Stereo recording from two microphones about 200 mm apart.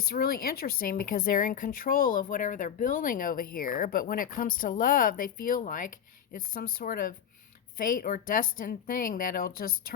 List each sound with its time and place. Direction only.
0.0 s speech: 50° left (ahead or behind)